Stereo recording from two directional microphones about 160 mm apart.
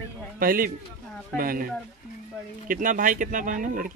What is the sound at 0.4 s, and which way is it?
A man's voice, 60° right (ahead or behind).